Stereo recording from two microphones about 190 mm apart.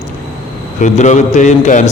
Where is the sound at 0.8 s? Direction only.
40° left (ahead or behind).